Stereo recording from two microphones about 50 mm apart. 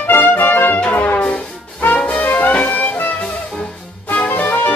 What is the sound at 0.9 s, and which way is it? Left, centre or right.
Music, left.